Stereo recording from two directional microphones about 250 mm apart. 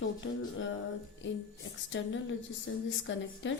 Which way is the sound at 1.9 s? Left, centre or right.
Left.